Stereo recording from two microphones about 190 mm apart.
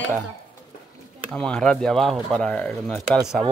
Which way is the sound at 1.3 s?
5° left (ahead or behind).